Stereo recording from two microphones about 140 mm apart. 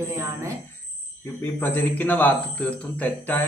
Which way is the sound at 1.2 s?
15° left (ahead or behind).